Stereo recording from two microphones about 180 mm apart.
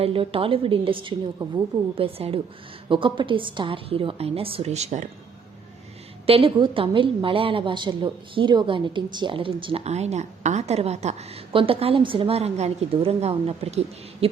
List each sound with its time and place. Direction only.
0.0 s a woman's voice: 30° right (ahead or behind)
6.2 s a woman's voice: 30° right (ahead or behind)